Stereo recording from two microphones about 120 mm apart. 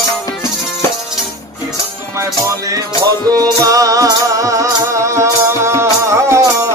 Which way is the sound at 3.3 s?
30° right (ahead or behind).